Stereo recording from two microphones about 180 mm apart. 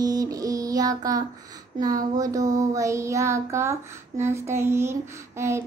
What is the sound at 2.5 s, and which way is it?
Child singing, 20° right (ahead or behind).